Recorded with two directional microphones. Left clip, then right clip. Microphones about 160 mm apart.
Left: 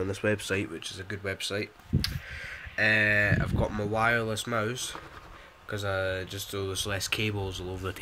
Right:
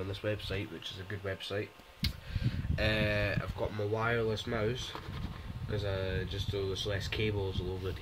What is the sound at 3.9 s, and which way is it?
Speech, 40° left (ahead or behind).